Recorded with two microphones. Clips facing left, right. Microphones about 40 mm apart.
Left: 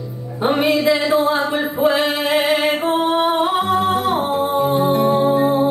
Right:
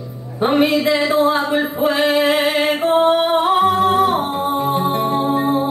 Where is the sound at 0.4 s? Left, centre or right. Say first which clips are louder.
Right 1 dB; centre.